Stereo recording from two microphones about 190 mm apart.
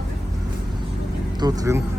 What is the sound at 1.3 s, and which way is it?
Speech, 20° right (ahead or behind).